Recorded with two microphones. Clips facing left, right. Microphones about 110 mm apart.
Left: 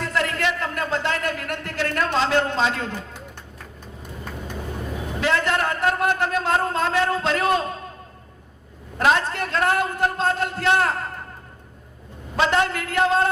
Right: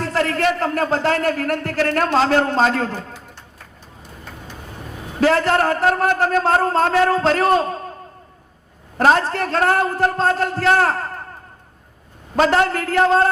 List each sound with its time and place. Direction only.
0.0 s a man's voice: 40° right (ahead or behind)
5.2 s a man's voice: 40° right (ahead or behind)
9.0 s a man's voice: 40° right (ahead or behind)
12.4 s a man's voice: 40° right (ahead or behind)